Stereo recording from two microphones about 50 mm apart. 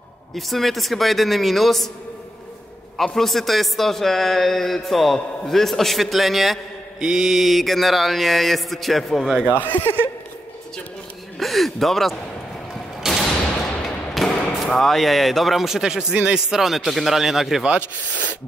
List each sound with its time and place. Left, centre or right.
0.4 s a man's voice: centre
3.0 s a man's voice: centre
7.0 s a man's voice: centre
9.4 s speech: left
11.3 s a man's voice: centre
13.1 s a sound: centre
14.2 s thump: centre
14.6 s a man's voice: centre